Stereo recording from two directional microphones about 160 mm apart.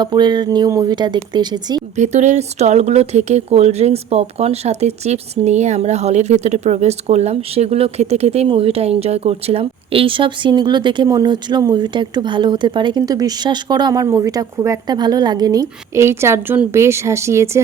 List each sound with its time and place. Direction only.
0.0 s speech: 25° right (ahead or behind)
2.0 s speech: 45° right (ahead or behind); by 17.6 s 15° right (ahead or behind)